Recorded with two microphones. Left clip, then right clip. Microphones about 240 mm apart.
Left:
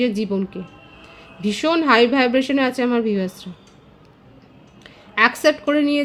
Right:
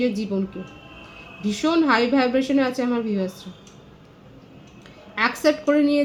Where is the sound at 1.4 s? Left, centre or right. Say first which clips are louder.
Left 2 dB; left.